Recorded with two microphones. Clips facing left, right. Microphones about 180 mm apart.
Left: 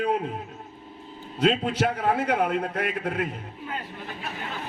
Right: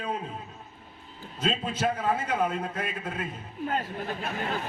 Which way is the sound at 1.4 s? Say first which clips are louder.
Left 5 dB; 65° left (ahead or behind).